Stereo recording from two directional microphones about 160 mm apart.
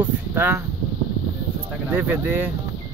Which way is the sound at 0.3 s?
15° right (ahead or behind).